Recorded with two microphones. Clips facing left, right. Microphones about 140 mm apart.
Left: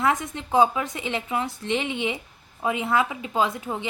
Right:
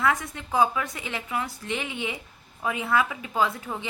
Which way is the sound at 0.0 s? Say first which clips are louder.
Left 2 dB; 20° left (ahead or behind).